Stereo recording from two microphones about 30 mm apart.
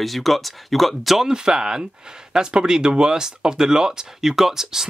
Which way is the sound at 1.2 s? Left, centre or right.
Right.